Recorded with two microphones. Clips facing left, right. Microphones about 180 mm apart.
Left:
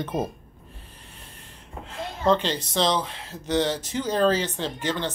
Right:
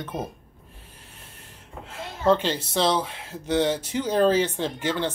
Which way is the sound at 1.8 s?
10° right (ahead or behind).